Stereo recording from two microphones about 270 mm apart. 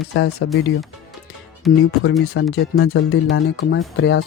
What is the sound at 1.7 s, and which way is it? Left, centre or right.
Speech, centre.